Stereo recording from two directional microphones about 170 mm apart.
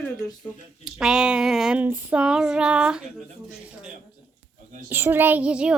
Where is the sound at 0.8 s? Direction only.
5° right (ahead or behind).